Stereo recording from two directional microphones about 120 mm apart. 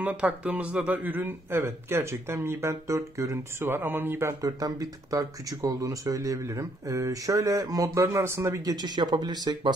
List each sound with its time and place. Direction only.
0.0 s speech: 10° right (ahead or behind)
8.8 s speech: 40° right (ahead or behind)